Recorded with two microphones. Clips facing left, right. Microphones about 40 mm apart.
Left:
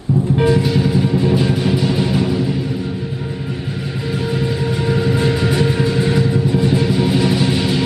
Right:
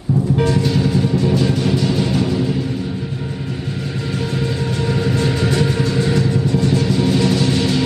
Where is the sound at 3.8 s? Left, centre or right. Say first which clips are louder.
Left 2 dB; centre.